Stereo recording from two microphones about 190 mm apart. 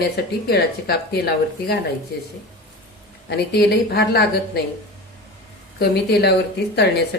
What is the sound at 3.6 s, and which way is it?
Speech, 60° left (ahead or behind).